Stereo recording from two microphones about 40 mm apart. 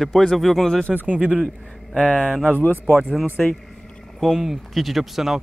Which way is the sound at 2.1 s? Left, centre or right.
Centre.